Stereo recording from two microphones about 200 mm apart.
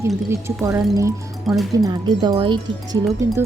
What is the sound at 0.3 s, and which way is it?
Speech, 15° right (ahead or behind).